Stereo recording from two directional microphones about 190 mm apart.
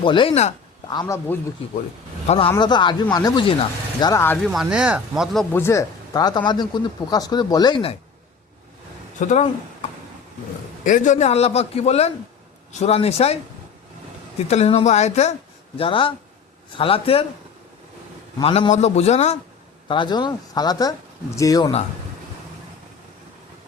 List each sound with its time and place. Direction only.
0.0 s speech: 25° left (ahead or behind)
0.9 s a man's voice: 20° left (ahead or behind)
2.2 s a man's voice: 35° left (ahead or behind)
2.6 s speech: 25° left (ahead or behind)
4.1 s a man's voice: 10° left (ahead or behind)
4.4 s speech: 5° right (ahead or behind); by 7.9 s 25° left (ahead or behind)
9.2 s a man's voice: 35° left (ahead or behind)
10.8 s a man's voice: 40° left (ahead or behind)
14.4 s a man's voice: 35° left (ahead or behind)
18.3 s a man's voice: 30° left (ahead or behind)
19.9 s speech: 25° left (ahead or behind)